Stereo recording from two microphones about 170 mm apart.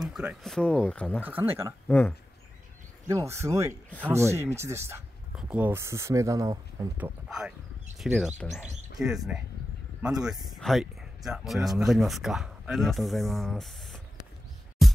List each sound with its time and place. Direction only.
0.0 s speech: 5° right (ahead or behind)
1.2 s speech: 10° right (ahead or behind)
1.9 s speech: 10° left (ahead or behind)
3.1 s speech: 15° right (ahead or behind)
7.0 s speech: centre (ahead or behind)
14.8 s music: centre (ahead or behind)